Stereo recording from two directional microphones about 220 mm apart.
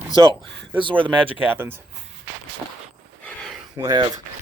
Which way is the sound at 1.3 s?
10° right (ahead or behind).